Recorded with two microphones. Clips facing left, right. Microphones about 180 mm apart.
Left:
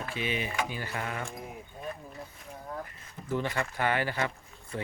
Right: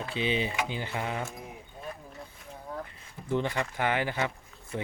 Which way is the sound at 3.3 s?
20° right (ahead or behind).